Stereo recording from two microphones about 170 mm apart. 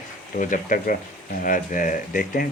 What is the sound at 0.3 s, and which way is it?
Speech, 50° left (ahead or behind).